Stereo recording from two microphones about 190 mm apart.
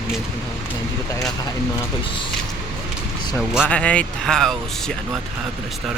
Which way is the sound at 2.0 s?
25° left (ahead or behind).